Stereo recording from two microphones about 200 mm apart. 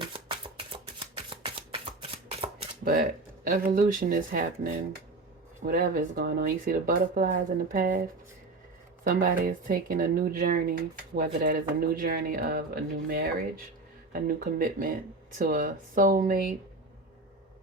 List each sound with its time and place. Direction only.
0.3 s shuffling cards: 25° right (ahead or behind)
2.8 s speech: 45° right (ahead or behind)
9.0 s speech: 45° right (ahead or behind)